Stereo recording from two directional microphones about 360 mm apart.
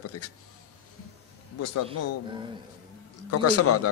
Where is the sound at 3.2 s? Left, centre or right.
Left.